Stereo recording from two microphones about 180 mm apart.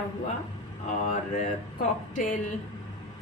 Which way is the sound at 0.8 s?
40° left (ahead or behind).